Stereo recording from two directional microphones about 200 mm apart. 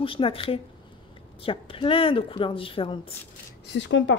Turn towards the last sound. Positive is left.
turn(degrees=65)  # may be behind; listen again after turning